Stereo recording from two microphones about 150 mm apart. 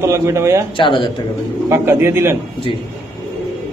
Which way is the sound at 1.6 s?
15° right (ahead or behind).